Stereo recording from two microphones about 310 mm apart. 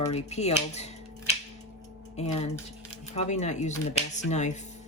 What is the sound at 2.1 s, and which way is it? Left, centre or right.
Speech, left.